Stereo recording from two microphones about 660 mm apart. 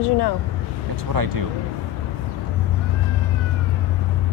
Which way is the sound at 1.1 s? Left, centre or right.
Right.